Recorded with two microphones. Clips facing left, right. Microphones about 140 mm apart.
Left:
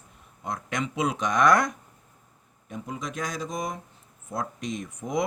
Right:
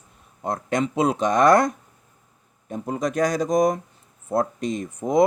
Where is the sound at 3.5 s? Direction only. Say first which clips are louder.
Right 13 dB; 70° right (ahead or behind).